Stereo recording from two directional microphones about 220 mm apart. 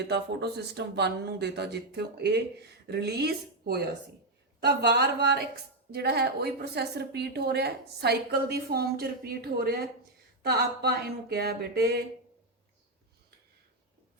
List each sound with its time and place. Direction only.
0.1 s a woman's voice: 50° right (ahead or behind)